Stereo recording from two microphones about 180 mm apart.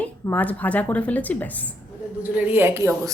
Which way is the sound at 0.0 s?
10° left (ahead or behind).